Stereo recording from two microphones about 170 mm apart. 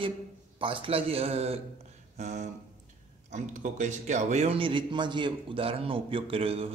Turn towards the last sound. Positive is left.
turn(degrees=-35)  # may be behind; listen again after turning